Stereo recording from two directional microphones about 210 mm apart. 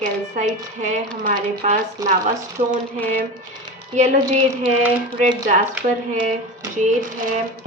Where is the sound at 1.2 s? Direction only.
40° right (ahead or behind).